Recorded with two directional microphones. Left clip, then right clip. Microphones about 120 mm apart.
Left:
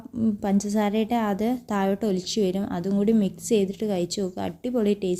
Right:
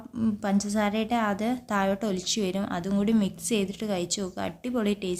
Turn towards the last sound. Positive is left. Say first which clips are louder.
# left 5 dB
turn(degrees=35)  # may be behind; listen again after turning